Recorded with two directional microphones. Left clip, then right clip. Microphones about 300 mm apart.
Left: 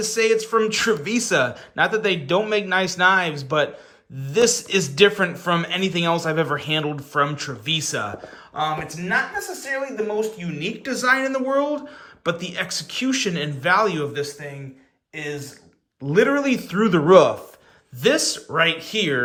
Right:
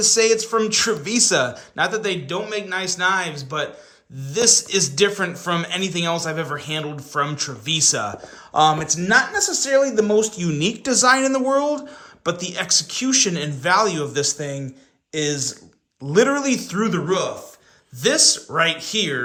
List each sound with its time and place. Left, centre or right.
0.0 s a man's voice: centre
16.0 s a man's voice: centre
18.0 s a man's voice: centre